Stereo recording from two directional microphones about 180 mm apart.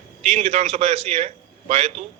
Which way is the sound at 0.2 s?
40° right (ahead or behind).